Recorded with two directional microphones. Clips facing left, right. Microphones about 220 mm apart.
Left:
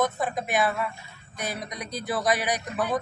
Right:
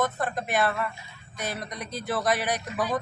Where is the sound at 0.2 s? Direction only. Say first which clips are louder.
Left 1 dB; 5° left (ahead or behind).